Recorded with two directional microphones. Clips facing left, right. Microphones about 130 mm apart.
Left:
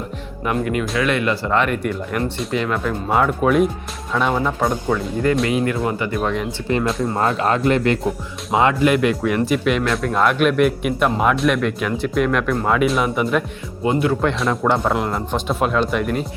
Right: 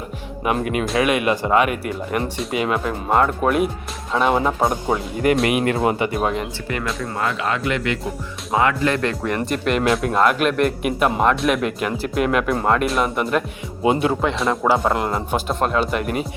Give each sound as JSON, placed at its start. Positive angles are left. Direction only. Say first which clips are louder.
{"t": 0.4, "sound": "speech", "louder": "even", "side_deg": -15}
{"t": 4.4, "sound": "speech", "louder": "right 1 dB", "side_deg": -15}
{"t": 5.5, "sound": "speech", "louder": "even", "side_deg": -75}
{"t": 5.8, "sound": "speech", "louder": "right 2 dB", "side_deg": -20}
{"t": 7.0, "sound": "speech", "louder": "left 4 dB", "side_deg": 35}
{"t": 8.5, "sound": "speech", "louder": "left 3 dB", "side_deg": 20}
{"t": 13.8, "sound": "speech", "louder": "even", "side_deg": -20}
{"t": 14.2, "sound": "speech", "louder": "left 1 dB", "side_deg": 0}